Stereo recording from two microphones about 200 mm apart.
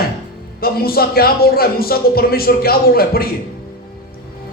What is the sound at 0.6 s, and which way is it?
A woman's voice, 50° left (ahead or behind).